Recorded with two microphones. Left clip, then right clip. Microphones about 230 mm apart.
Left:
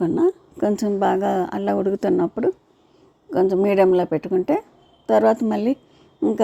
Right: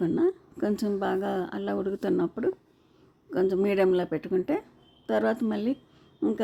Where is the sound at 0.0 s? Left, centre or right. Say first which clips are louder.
Left 6 dB; centre.